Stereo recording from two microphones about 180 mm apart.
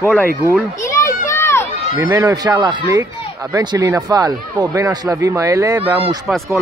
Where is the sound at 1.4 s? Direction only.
15° left (ahead or behind).